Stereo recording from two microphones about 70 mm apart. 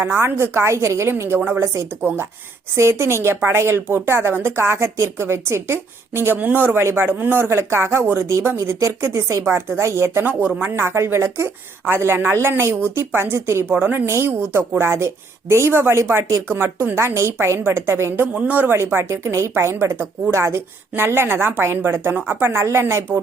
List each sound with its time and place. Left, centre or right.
0.0 s a woman's voice: right
3.0 s a woman's voice: right
10.2 s speech: right
10.8 s a woman's voice: right
13.7 s a woman's voice: right
18.3 s speech: right
18.8 s a woman's voice: right